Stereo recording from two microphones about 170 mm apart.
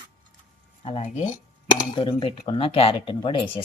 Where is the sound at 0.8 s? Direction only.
40° left (ahead or behind).